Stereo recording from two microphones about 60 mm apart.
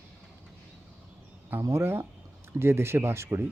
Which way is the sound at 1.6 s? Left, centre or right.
Right.